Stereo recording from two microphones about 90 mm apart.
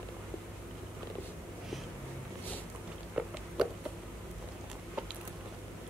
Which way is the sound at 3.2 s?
10° right (ahead or behind).